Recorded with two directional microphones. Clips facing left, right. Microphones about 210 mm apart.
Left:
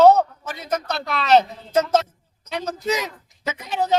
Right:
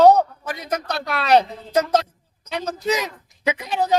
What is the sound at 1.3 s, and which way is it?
Speech, 15° right (ahead or behind).